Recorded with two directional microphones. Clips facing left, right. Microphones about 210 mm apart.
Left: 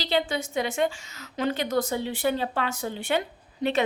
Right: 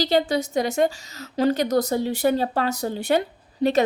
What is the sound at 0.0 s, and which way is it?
A woman's voice, 40° right (ahead or behind).